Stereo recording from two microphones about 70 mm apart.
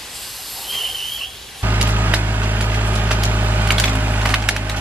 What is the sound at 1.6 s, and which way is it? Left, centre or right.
Vehicle, right.